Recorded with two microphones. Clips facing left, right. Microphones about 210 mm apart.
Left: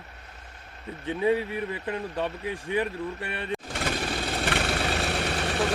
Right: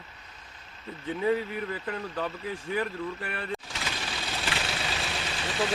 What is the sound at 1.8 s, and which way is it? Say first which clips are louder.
Speech: left 3 dB; 20° left (ahead or behind).